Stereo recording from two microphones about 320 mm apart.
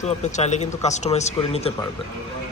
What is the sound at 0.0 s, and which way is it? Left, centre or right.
Speech, left.